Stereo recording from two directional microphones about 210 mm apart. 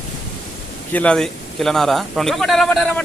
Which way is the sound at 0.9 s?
5° left (ahead or behind).